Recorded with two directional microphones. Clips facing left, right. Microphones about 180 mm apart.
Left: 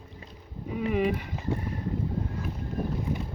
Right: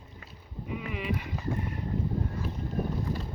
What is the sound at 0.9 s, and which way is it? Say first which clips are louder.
Speech: left 9 dB; 45° left (ahead or behind).